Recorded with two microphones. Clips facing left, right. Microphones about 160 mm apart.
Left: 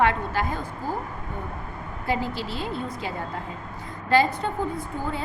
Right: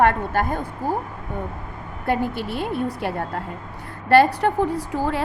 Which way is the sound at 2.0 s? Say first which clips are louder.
Right 4 dB; 55° right (ahead or behind).